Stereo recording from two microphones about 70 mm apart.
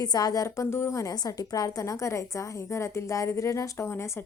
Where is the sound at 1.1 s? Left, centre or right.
Left.